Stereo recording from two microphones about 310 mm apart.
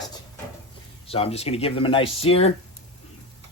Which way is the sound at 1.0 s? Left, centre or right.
Centre.